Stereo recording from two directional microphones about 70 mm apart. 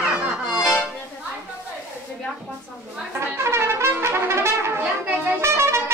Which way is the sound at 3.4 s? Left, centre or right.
Right.